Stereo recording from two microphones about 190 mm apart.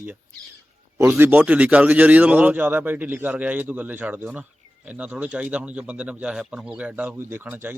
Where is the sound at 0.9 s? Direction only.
10° right (ahead or behind).